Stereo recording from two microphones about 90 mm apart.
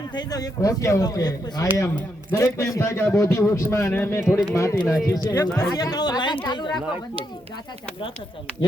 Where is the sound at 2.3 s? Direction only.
35° left (ahead or behind).